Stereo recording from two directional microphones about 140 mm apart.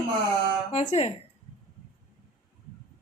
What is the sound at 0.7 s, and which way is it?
Speech, 50° left (ahead or behind).